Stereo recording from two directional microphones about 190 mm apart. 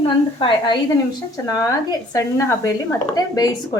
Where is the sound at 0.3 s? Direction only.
25° left (ahead or behind).